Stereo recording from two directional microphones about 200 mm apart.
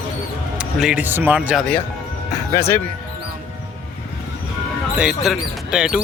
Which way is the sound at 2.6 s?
10° left (ahead or behind).